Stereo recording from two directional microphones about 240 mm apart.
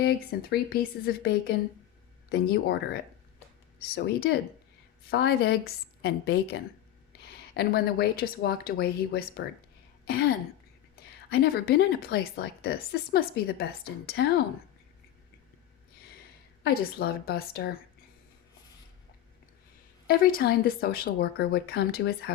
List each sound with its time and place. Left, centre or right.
0.0 s a woman's voice: left
16.6 s a woman's voice: left
20.1 s a woman's voice: left